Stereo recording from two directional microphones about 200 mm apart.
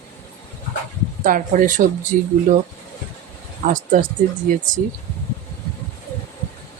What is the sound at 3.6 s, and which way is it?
Speech, 40° right (ahead or behind).